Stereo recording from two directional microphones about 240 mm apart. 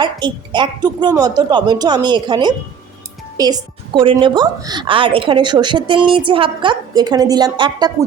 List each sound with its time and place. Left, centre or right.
0.0 s a woman's voice: centre